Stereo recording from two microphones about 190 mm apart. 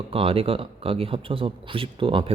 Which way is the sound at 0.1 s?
30° right (ahead or behind).